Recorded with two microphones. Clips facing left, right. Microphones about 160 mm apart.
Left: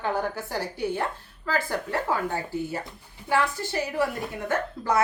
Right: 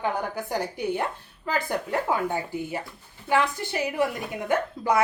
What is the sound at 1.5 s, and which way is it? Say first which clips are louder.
Speech: right 1 dB; 15° right (ahead or behind).